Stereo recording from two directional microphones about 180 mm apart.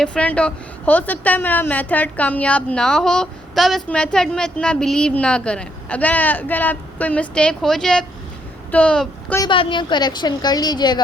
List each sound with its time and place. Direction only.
0.0 s a woman's voice: 5° left (ahead or behind)
9.4 s a woman's voice: 30° left (ahead or behind)